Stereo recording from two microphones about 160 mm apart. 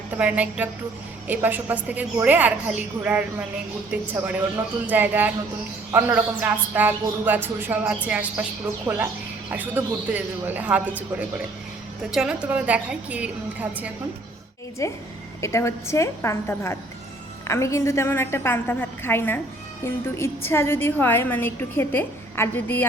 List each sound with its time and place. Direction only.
0.2 s speech: 10° right (ahead or behind)
12.1 s speech: 5° right (ahead or behind)
14.8 s a woman's voice: 20° left (ahead or behind)